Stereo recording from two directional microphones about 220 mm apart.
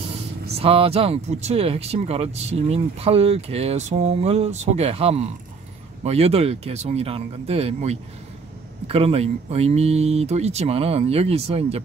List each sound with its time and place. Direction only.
0.5 s speech: 25° right (ahead or behind)